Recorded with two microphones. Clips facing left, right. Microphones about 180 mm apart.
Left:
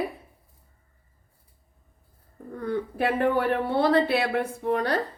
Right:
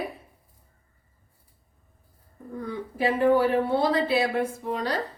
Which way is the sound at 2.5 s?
60° left (ahead or behind).